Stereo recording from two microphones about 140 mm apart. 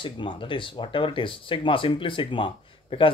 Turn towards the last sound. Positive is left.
turn(degrees=40)  # may be behind; listen again after turning